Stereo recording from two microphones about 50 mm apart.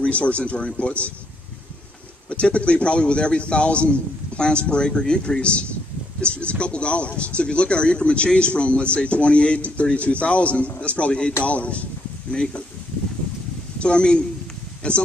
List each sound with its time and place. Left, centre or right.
0.0 s speech: left
2.2 s speech: left
13.7 s speech: centre